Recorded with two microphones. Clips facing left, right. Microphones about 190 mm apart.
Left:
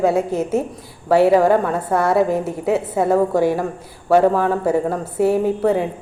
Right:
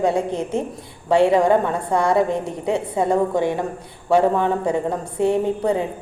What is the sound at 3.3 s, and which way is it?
Speech, 25° right (ahead or behind).